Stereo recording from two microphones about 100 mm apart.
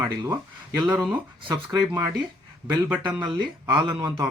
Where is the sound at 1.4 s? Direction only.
50° right (ahead or behind).